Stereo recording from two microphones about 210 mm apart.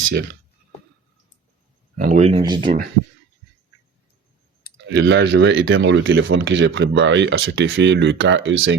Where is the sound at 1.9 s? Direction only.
35° right (ahead or behind).